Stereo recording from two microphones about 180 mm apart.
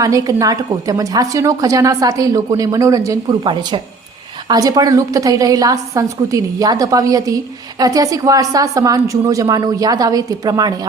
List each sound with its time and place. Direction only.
0.0 s a woman's voice: 20° right (ahead or behind)